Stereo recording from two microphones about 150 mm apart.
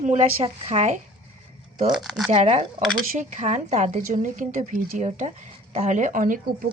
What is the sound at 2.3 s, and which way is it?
A woman's voice, 50° right (ahead or behind).